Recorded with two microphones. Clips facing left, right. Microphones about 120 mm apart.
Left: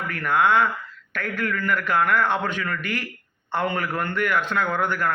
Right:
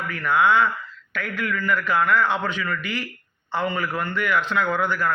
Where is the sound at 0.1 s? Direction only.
50° left (ahead or behind).